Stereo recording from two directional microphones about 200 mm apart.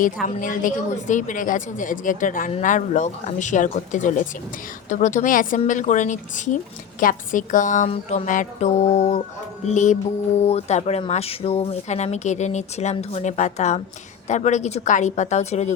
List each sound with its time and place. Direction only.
0.0 s speech: 40° left (ahead or behind)